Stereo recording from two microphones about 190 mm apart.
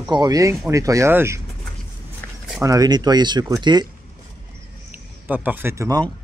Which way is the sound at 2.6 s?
20° right (ahead or behind).